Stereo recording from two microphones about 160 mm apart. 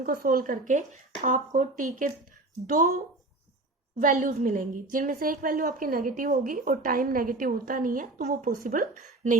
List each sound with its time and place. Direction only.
0.0 s a woman's voice: 60° right (ahead or behind)
3.9 s a woman's voice: 55° right (ahead or behind)